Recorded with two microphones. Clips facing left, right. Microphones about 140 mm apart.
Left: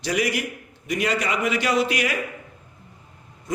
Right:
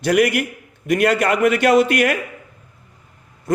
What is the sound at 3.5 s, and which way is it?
Speech, 55° right (ahead or behind).